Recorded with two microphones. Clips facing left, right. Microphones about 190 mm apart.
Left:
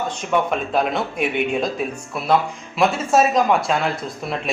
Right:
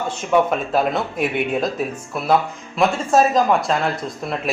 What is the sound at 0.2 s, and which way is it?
Speech, 5° right (ahead or behind).